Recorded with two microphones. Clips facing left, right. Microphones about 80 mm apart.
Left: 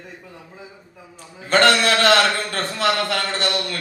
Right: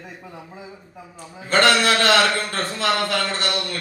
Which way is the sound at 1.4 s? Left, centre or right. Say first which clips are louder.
Left 1 dB; left.